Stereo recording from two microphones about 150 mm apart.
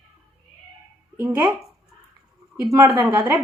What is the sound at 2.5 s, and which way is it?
Speech, 15° right (ahead or behind).